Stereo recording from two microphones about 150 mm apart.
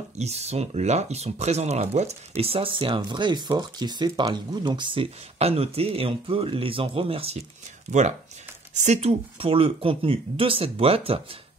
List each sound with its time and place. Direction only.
0.2 s speech: 45° right (ahead or behind)
7.9 s speech: 50° right (ahead or behind)